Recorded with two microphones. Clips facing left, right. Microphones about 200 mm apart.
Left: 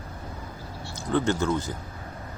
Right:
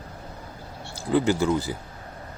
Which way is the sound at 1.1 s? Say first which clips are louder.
Right 3 dB; 10° right (ahead or behind).